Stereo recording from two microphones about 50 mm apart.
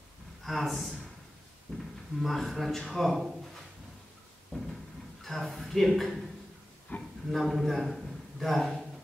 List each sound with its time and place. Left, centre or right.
0.4 s a man's voice: centre
1.7 s drawer open or close: centre
2.1 s a man's voice: centre
4.5 s a sound: centre
5.2 s a man's voice: centre
6.9 s a sound: left
7.2 s a man's voice: centre